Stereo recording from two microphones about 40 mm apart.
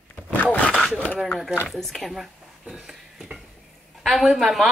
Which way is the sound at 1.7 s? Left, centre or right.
Centre.